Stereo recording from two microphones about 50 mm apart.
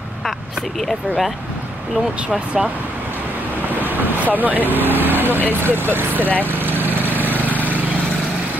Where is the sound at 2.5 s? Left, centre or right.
Centre.